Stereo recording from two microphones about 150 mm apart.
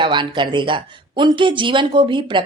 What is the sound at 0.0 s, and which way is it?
Speech, 30° right (ahead or behind).